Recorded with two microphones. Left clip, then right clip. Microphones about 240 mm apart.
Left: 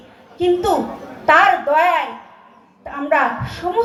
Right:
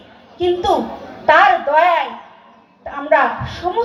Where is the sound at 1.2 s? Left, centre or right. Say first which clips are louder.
Right 1 dB; left.